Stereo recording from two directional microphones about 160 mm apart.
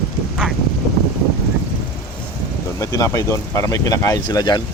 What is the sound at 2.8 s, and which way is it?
Speech, 20° left (ahead or behind).